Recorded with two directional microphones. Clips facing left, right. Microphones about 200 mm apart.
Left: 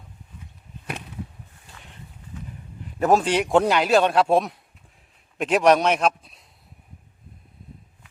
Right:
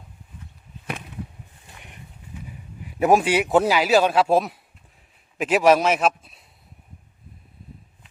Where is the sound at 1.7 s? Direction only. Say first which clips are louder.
Even; 15° right (ahead or behind).